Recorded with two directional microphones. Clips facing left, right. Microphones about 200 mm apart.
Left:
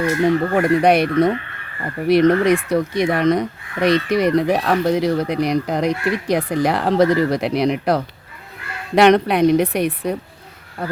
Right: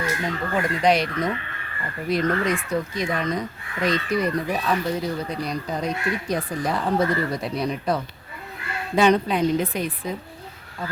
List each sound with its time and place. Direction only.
0.2 s speech: 60° left (ahead or behind)
2.0 s a woman's voice: 70° left (ahead or behind)